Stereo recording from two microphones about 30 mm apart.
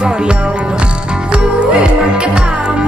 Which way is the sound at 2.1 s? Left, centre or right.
Right.